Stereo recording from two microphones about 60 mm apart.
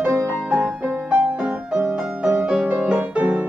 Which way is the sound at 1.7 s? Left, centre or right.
Centre.